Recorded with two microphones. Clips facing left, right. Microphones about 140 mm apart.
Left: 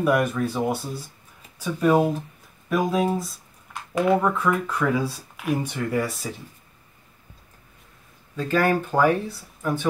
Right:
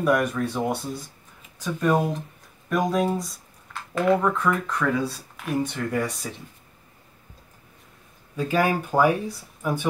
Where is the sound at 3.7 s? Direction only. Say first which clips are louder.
Left 1 dB; 15° left (ahead or behind).